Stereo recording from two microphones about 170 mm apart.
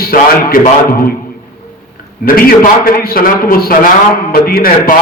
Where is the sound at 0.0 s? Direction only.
60° left (ahead or behind).